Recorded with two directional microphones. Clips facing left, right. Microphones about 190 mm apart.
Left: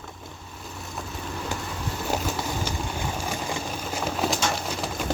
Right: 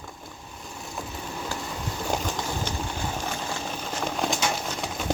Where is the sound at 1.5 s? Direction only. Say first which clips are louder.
Left 1 dB; 20° left (ahead or behind).